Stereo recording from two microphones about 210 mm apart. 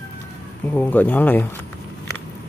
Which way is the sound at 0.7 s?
10° left (ahead or behind).